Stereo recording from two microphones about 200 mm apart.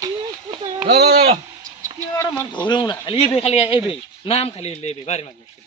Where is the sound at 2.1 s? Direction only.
15° left (ahead or behind).